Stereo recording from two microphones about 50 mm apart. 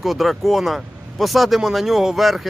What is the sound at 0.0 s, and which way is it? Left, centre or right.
Speech, centre.